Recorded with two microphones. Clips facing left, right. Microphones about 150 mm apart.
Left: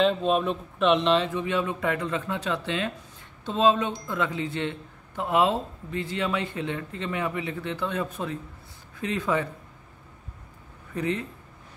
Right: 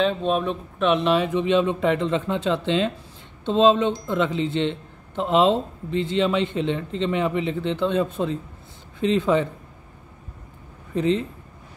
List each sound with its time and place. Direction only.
0.0 s speech: centre (ahead or behind)
1.3 s speech: 20° right (ahead or behind)
11.0 s speech: 25° right (ahead or behind)